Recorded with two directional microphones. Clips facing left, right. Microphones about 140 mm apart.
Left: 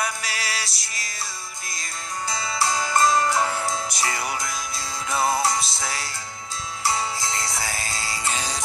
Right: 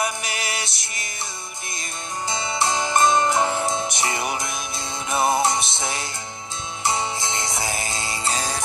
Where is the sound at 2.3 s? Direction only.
20° right (ahead or behind).